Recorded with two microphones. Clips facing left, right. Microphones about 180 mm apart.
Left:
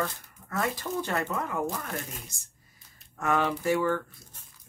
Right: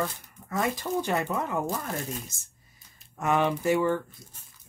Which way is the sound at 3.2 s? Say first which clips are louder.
Right 2 dB; 20° right (ahead or behind).